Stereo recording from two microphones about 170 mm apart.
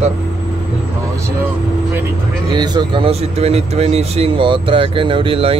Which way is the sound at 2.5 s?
25° right (ahead or behind).